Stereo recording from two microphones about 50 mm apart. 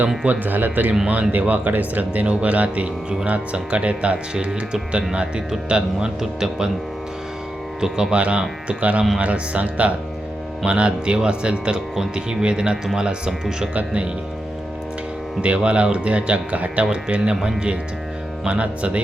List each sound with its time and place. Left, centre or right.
0.3 s speech: right; by 6.7 s centre
7.8 s speech: centre
15.4 s speech: right